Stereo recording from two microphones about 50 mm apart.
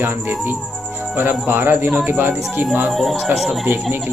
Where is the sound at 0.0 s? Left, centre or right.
Right.